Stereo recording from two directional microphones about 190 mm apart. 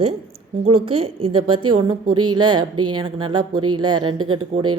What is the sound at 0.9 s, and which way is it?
A woman's voice, 30° right (ahead or behind).